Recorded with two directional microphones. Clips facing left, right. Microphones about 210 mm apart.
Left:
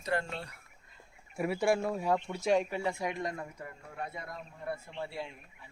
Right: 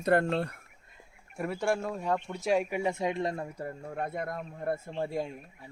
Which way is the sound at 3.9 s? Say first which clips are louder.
Right 6 dB; 55° right (ahead or behind).